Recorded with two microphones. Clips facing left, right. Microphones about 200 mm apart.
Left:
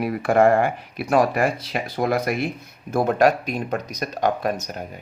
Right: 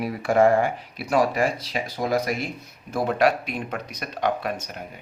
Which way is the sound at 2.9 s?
45° left (ahead or behind).